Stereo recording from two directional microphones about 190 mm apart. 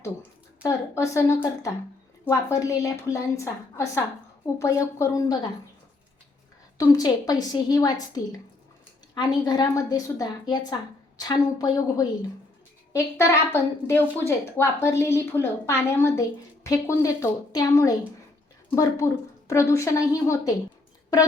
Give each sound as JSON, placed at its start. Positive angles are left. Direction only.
{"t": 0.6, "sound": "a woman's voice", "side_deg": 15}
{"t": 6.7, "sound": "a woman's voice", "side_deg": 20}